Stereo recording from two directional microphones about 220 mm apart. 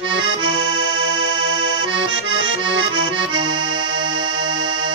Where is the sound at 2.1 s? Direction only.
60° right (ahead or behind).